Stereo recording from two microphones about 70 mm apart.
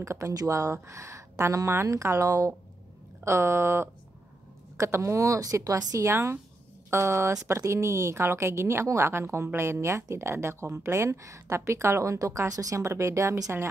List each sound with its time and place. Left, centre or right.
0.0 s a woman's voice: right
0.3 s speech: right
0.8 s a woman's voice: right
3.3 s a woman's voice: right
6.0 s a woman's voice: right
12.8 s a woman's voice: right